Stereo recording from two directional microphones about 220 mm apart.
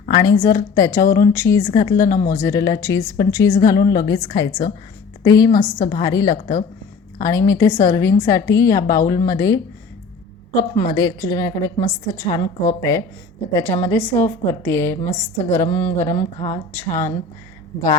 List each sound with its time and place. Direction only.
0.1 s a woman's voice: 20° left (ahead or behind)
13.5 s a woman's voice: 10° left (ahead or behind)
16.1 s a woman's voice: 20° left (ahead or behind)